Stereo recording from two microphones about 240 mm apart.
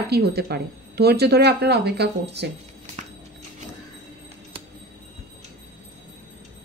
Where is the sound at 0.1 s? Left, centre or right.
Right.